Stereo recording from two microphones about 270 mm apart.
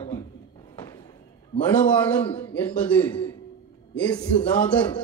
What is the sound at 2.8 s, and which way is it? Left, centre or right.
Speech, centre.